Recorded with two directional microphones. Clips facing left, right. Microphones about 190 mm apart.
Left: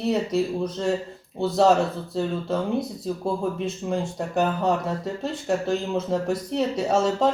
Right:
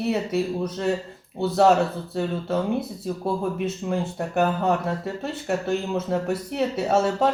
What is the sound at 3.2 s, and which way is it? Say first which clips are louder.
Speech: right 1 dB; 5° right (ahead or behind).